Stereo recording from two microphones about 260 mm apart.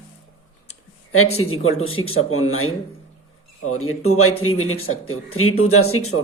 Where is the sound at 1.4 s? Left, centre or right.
Left.